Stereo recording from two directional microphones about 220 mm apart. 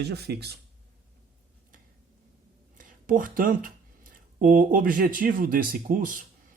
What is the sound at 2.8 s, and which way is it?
Speech, 40° right (ahead or behind).